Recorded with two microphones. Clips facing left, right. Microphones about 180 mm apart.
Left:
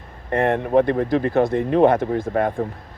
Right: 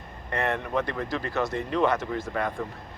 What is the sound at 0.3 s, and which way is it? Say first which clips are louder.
Speech: left 10 dB; 50° left (ahead or behind).